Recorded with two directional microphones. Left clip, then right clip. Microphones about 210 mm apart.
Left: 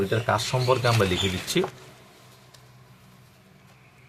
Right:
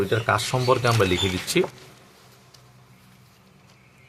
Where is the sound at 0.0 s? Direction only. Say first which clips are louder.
Right 2 dB; 30° right (ahead or behind).